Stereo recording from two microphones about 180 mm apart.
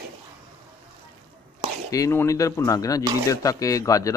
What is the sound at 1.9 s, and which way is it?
Speech, 15° left (ahead or behind).